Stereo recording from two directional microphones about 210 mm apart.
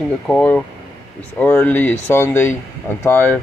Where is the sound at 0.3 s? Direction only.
5° left (ahead or behind).